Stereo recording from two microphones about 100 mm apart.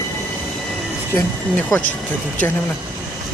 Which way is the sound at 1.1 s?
15° left (ahead or behind).